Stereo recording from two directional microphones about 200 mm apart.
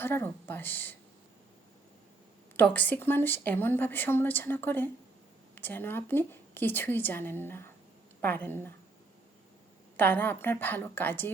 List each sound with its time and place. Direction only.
0.0 s a woman's voice: 10° left (ahead or behind)
2.6 s a woman's voice: 10° left (ahead or behind)
10.0 s a woman's voice: 10° left (ahead or behind)